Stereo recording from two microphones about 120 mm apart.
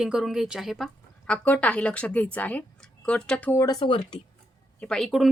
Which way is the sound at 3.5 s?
30° left (ahead or behind).